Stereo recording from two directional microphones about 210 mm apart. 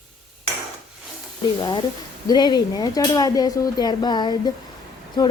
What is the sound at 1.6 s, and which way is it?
Speech, 20° left (ahead or behind).